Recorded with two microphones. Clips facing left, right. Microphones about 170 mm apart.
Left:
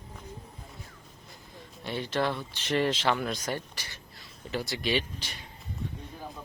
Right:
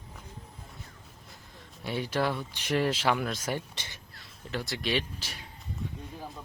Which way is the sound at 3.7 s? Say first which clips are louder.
Even; 25° right (ahead or behind).